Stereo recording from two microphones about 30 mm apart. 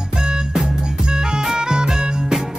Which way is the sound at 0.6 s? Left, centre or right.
Centre.